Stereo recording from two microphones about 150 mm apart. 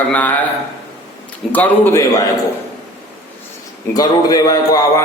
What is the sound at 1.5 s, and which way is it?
Speech, 10° left (ahead or behind).